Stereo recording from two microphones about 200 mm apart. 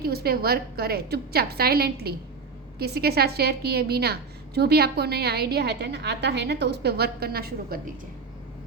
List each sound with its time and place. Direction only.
0.0 s a woman's voice: 50° right (ahead or behind)